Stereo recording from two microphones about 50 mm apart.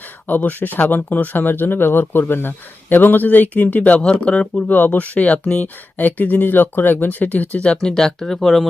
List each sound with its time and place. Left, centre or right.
0.3 s speech: left
4.7 s speech: left
7.5 s speech: left